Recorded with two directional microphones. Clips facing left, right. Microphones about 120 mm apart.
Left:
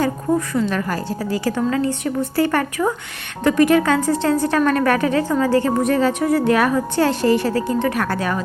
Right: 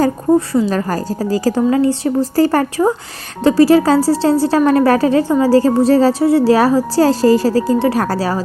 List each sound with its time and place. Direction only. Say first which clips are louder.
0.0 s a woman's voice: right 6 dB; 35° right (ahead or behind)
5.5 s a woman's voice: right 6 dB; 35° right (ahead or behind)